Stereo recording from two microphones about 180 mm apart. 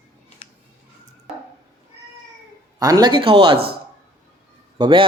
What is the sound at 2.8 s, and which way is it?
Speech, 20° right (ahead or behind).